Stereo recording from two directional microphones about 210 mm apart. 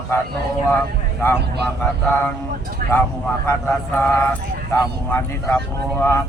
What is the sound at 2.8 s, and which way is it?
Speech, 40° right (ahead or behind).